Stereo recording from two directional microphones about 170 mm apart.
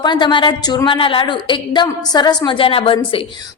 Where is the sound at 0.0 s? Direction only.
25° left (ahead or behind).